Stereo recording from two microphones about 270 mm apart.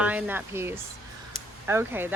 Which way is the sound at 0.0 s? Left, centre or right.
Centre.